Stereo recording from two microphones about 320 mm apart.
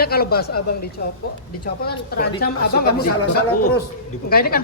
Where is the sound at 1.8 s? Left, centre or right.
Left.